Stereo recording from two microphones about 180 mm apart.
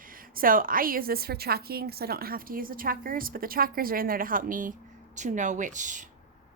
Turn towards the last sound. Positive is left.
turn(degrees=-45)  # may be behind; listen again after turning